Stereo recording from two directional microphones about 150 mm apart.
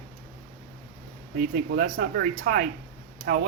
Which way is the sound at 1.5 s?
90° right.